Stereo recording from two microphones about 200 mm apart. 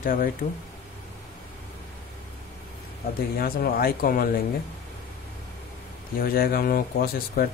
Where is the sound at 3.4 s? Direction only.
50° left (ahead or behind).